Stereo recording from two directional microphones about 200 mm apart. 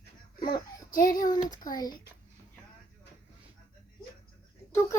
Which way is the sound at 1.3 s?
20° left (ahead or behind).